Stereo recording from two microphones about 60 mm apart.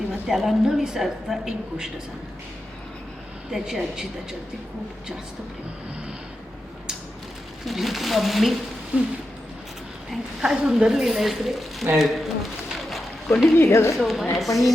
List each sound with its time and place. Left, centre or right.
0.1 s a woman's voice: centre
3.5 s a woman's voice: centre
7.6 s speech: centre
8.9 s fusillade: right
10.1 s a woman's voice: centre
13.6 s speech: left
13.9 s speech: centre